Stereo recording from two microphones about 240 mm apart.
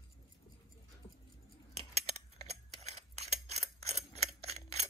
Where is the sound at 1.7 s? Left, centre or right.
Right.